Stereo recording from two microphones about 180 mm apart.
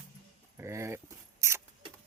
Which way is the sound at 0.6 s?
15° right (ahead or behind).